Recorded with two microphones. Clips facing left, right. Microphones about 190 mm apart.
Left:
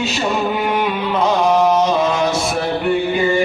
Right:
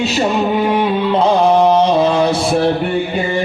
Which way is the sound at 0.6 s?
30° right (ahead or behind).